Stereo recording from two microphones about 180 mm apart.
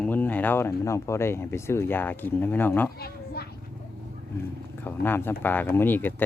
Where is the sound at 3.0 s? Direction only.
60° left (ahead or behind).